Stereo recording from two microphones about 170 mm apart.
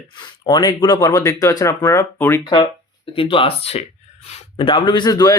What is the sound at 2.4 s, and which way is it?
A man's voice, 25° left (ahead or behind).